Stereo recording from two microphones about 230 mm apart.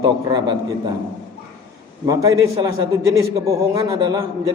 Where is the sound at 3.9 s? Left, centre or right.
Centre.